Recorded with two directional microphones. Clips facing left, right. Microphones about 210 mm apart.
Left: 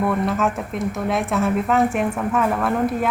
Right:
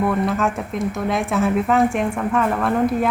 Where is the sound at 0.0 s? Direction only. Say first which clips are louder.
Right 1 dB; centre (ahead or behind).